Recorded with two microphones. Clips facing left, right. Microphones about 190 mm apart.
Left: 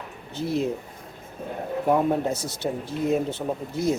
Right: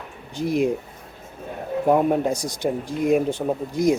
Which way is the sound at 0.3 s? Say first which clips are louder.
Right 4 dB; 15° right (ahead or behind).